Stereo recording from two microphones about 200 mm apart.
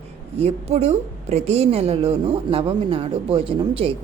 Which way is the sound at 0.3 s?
30° right (ahead or behind).